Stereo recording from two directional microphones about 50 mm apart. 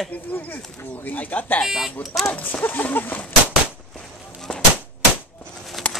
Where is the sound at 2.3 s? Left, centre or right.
Left.